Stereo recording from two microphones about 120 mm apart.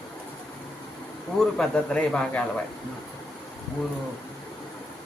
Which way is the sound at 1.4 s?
5° left (ahead or behind).